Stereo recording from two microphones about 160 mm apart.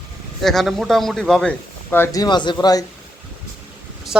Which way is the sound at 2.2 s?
30° left (ahead or behind).